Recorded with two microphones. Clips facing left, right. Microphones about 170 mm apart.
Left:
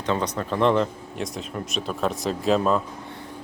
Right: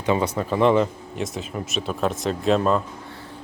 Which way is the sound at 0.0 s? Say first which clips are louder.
Right 3 dB; 10° right (ahead or behind).